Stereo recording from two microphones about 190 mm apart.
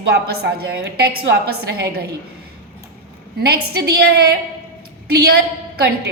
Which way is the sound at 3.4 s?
60° right (ahead or behind).